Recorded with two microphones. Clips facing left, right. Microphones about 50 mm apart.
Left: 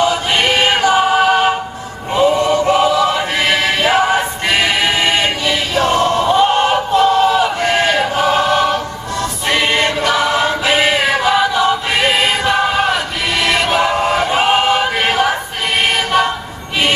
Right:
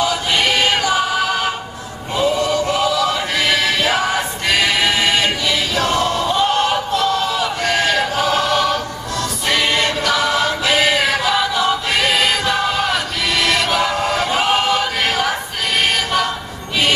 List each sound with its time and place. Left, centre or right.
0.0 s choir: left
13.4 s chant: left